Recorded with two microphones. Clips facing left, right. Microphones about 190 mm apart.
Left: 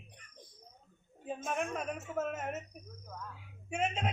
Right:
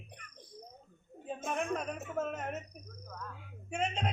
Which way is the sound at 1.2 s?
5° left (ahead or behind).